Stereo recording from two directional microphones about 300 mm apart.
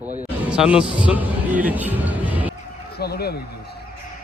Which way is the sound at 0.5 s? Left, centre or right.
Centre.